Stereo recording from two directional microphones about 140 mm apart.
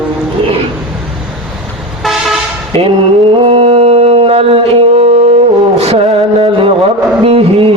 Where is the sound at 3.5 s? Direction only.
45° right (ahead or behind).